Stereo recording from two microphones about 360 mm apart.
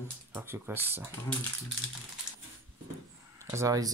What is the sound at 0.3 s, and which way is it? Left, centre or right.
Speech, centre.